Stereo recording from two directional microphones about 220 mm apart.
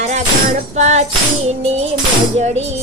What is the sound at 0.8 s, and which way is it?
Music, 30° right (ahead or behind).